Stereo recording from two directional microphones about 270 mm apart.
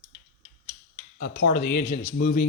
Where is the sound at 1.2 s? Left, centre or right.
Left.